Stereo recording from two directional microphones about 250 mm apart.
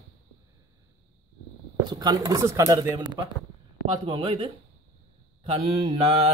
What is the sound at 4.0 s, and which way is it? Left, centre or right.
Mantra, right.